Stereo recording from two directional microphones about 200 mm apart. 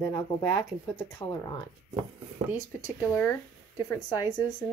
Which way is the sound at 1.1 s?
20° left (ahead or behind).